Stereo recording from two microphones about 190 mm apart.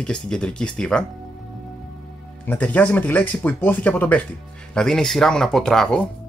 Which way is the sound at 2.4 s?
10° left (ahead or behind).